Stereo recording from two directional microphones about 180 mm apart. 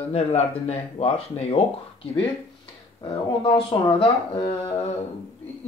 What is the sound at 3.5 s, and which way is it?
Speech, 30° left (ahead or behind).